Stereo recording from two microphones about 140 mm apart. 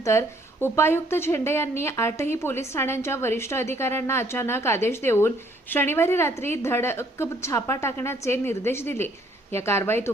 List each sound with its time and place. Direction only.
0.0 s a woman's voice: 20° left (ahead or behind)